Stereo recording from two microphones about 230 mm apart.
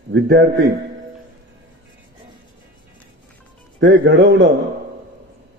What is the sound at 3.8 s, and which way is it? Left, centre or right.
Speech, right.